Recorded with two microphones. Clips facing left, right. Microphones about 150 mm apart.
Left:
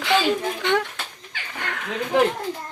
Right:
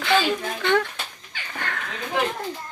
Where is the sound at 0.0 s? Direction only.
15° left (ahead or behind).